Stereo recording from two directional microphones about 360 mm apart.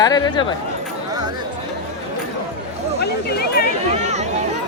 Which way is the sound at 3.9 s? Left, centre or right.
Centre.